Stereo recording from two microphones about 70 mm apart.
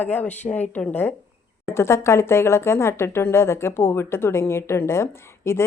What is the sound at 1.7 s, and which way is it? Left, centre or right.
Speech, left.